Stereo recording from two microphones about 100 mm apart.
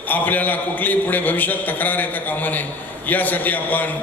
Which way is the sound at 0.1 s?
15° left (ahead or behind).